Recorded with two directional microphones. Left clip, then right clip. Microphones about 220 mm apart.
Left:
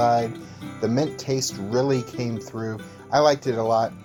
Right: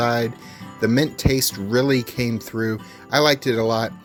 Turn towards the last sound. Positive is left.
turn(degrees=-50)  # may be behind; listen again after turning